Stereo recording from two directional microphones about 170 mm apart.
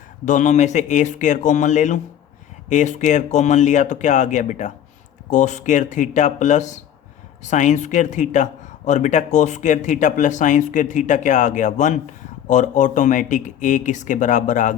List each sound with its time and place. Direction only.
0.3 s speech: 45° left (ahead or behind)